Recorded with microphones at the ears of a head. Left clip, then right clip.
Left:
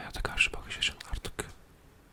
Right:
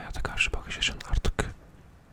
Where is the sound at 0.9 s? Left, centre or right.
Right.